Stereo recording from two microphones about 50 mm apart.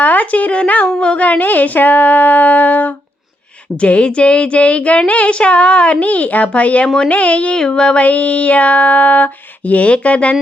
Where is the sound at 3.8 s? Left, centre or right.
Left.